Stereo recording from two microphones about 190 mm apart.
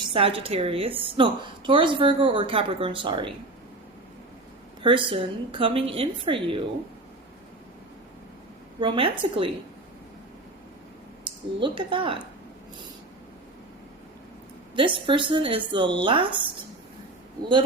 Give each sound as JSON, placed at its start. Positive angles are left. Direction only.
{"t": 0.0, "sound": "a woman's voice", "side_deg": -25}
{"t": 4.8, "sound": "a woman's voice", "side_deg": -25}
{"t": 8.8, "sound": "a woman's voice", "side_deg": -25}
{"t": 11.3, "sound": "a woman's voice", "side_deg": -25}
{"t": 14.8, "sound": "a woman's voice", "side_deg": -25}